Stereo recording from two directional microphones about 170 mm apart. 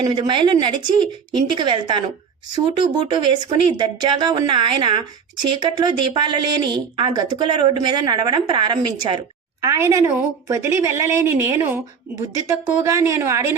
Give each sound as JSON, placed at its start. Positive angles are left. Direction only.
{"t": 0.0, "sound": "a woman's voice", "side_deg": -30}
{"t": 3.1, "sound": "a woman's voice", "side_deg": -25}